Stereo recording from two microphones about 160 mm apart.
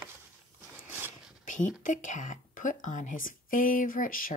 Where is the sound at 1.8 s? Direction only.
55° left (ahead or behind).